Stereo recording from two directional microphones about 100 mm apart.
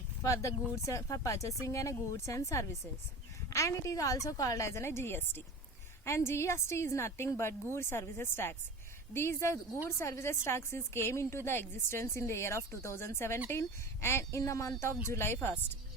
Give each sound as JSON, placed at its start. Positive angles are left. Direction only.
{"t": 0.2, "sound": "a woman's voice", "side_deg": 30}